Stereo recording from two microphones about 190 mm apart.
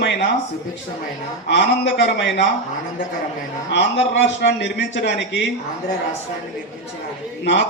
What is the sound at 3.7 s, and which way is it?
A man's voice, 70° left (ahead or behind).